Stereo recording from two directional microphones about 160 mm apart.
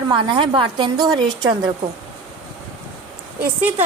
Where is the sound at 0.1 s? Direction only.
30° right (ahead or behind).